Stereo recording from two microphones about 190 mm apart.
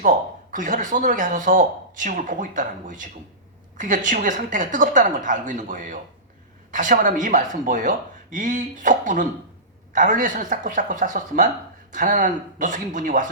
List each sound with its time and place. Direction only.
0.0 s speech: 45° right (ahead or behind)